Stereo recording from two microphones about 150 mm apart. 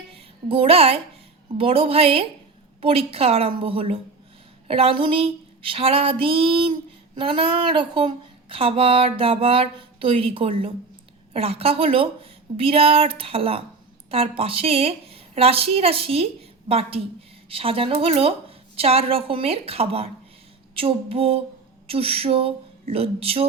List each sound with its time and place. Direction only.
0.1 s speech: 35° right (ahead or behind)